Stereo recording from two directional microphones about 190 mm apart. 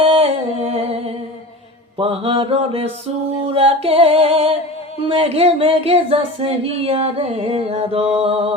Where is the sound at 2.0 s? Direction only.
30° right (ahead or behind).